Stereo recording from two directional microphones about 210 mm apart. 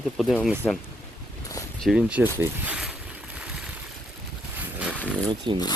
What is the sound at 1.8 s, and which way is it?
Speech, 5° right (ahead or behind).